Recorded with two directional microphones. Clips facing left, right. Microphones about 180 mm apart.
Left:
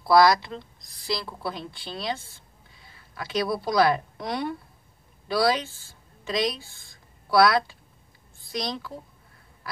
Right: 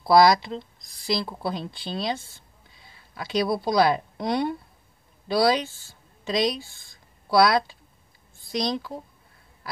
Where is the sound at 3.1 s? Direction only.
20° right (ahead or behind).